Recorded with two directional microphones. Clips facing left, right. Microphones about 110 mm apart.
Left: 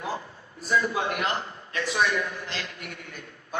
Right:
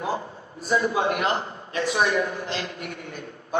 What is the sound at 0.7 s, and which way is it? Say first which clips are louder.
A man's voice: right 3 dB; 25° right (ahead or behind).